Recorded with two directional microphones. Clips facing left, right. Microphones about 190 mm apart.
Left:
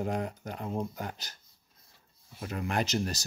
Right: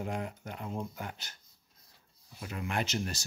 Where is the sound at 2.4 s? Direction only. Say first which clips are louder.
Left 3 dB; 40° left (ahead or behind).